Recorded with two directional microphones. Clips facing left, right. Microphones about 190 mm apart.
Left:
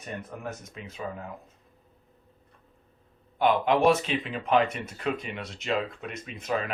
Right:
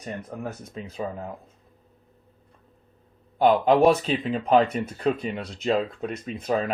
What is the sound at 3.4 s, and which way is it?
Speech, 40° right (ahead or behind).